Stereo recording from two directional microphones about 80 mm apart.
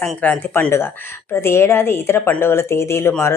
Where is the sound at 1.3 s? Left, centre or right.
Left.